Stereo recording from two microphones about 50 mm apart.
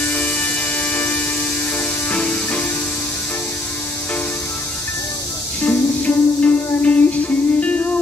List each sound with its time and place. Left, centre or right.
2.0 s music: left
5.6 s music: left